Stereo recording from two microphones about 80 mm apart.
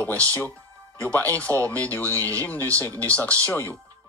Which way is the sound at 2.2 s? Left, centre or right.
Right.